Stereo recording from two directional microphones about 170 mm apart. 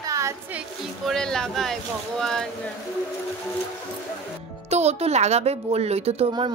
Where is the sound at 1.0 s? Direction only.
5° left (ahead or behind).